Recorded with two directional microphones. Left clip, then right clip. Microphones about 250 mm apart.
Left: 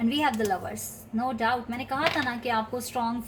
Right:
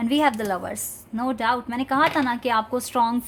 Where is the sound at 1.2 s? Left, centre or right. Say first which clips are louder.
Right 3 dB; right.